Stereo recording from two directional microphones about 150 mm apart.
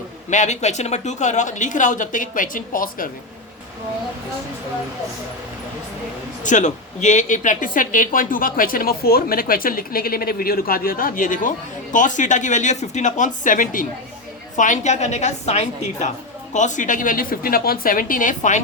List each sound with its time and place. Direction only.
0.3 s speech: 50° left (ahead or behind); by 3.1 s 65° left (ahead or behind)
6.4 s speech: 55° left (ahead or behind)